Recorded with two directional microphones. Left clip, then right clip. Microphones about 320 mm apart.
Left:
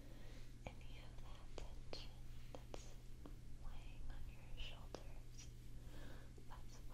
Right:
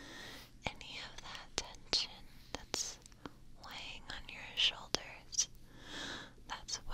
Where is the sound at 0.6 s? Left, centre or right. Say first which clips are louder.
Right 16 dB; right.